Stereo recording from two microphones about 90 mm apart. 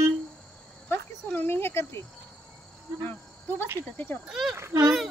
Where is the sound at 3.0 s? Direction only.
20° left (ahead or behind).